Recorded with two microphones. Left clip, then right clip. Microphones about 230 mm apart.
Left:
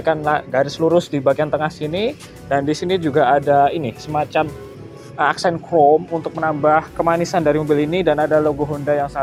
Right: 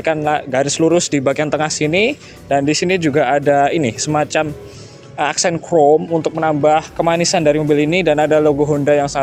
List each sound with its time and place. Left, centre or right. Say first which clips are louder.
0.0 s speech: right 1 dB; right
3.3 s speech: right 1 dB; right